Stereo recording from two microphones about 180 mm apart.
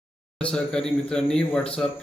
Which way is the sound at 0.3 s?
5° left (ahead or behind).